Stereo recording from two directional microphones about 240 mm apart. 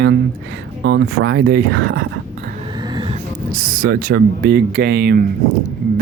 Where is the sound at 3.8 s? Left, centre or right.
Right.